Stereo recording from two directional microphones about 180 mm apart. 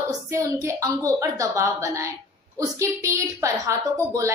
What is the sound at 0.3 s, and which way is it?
A woman's voice, 15° right (ahead or behind).